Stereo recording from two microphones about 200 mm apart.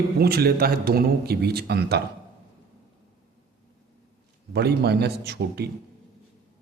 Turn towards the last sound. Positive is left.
turn(degrees=-55)  # may be behind; listen again after turning